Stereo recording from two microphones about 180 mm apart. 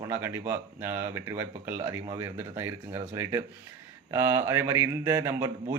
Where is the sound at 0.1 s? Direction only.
15° right (ahead or behind).